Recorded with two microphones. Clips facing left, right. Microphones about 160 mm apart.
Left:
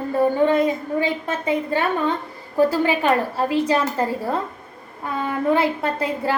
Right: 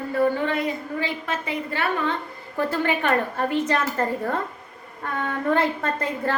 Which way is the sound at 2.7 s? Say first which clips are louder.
Left 3 dB; 10° left (ahead or behind).